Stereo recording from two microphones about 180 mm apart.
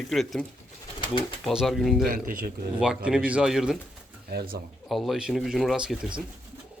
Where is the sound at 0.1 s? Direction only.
Centre (ahead or behind).